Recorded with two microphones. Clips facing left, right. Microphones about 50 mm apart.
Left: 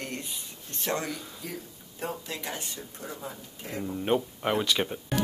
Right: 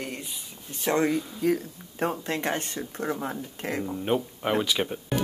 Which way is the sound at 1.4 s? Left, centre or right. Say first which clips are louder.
Right 17 dB; right.